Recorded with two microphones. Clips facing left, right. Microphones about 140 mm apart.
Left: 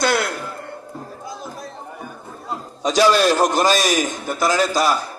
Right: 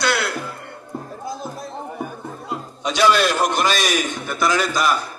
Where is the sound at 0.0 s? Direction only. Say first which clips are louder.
Left 2 dB; 45° left (ahead or behind).